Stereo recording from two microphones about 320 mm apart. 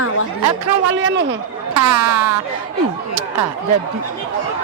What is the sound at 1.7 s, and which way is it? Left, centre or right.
Speech, right.